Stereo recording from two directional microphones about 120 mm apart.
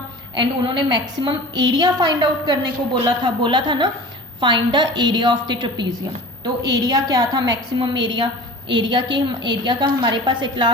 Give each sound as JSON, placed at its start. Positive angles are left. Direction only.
{"t": 0.3, "sound": "a woman's voice", "side_deg": -40}